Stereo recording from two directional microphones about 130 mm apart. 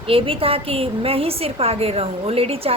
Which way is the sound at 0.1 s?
45° right (ahead or behind).